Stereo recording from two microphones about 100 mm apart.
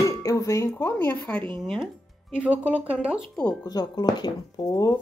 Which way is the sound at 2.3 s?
15° right (ahead or behind).